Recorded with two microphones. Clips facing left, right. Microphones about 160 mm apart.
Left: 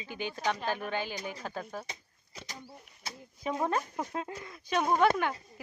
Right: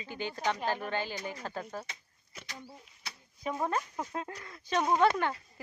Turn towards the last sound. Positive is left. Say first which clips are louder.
# even
turn(degrees=10)  # may be behind; listen again after turning